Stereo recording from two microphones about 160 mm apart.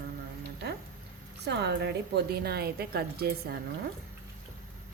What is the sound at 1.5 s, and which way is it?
A woman's voice, 90° right.